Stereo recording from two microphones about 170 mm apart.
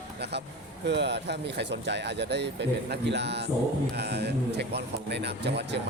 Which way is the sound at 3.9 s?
75° right (ahead or behind).